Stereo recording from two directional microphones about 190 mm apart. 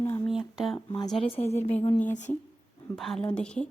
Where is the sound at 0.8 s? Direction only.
25° left (ahead or behind).